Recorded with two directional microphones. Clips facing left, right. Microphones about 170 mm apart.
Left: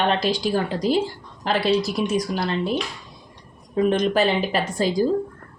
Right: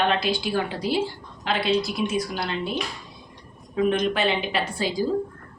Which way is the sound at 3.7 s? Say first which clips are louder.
Left 3 dB; 40° left (ahead or behind).